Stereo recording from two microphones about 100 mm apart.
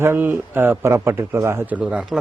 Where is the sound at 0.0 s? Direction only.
25° right (ahead or behind).